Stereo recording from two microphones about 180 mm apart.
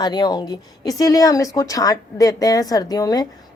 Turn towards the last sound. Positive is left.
turn(degrees=20)  # may be behind; listen again after turning